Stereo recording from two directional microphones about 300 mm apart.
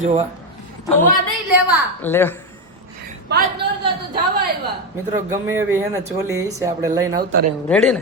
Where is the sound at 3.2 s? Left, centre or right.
Right.